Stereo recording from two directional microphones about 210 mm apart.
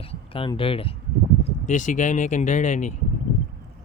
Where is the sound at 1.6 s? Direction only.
35° left (ahead or behind).